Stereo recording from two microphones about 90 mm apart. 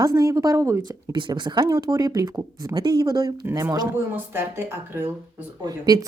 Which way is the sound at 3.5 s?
30° right (ahead or behind).